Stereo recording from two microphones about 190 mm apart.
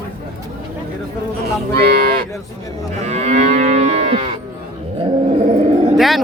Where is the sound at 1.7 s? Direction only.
55° right (ahead or behind).